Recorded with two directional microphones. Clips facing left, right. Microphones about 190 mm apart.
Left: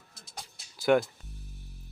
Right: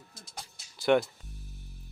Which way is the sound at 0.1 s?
Centre (ahead or behind).